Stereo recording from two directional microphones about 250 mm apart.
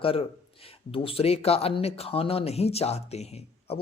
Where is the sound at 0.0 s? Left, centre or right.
Left.